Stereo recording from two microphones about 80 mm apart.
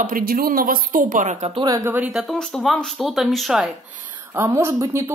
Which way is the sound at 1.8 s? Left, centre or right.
Right.